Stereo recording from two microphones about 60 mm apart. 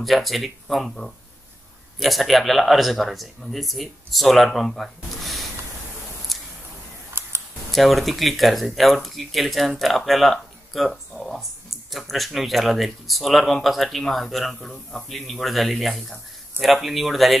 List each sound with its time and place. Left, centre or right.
0.0 s speech: centre
6.3 s a sound: centre
7.2 s computer keyboard: right
7.7 s speech: centre